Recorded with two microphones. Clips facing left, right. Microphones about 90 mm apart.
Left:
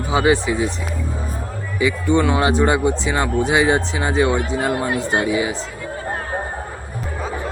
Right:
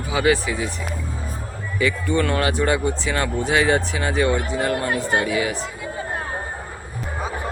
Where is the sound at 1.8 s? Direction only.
15° left (ahead or behind).